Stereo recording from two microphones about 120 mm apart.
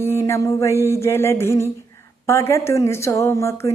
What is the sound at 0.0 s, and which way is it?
Speech, 20° left (ahead or behind).